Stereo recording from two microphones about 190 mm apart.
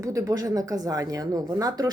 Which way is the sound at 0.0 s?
15° right (ahead or behind).